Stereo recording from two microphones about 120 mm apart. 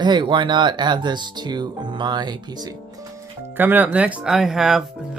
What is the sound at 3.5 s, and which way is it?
Speech, 15° right (ahead or behind).